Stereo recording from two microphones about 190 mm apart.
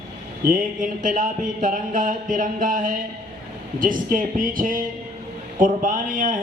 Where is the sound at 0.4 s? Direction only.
45° right (ahead or behind).